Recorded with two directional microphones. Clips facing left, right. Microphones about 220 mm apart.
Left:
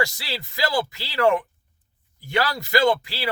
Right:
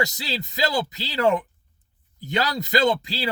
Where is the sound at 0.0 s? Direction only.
20° right (ahead or behind).